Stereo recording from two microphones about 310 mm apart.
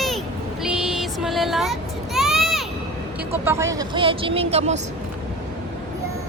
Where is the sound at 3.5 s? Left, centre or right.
Centre.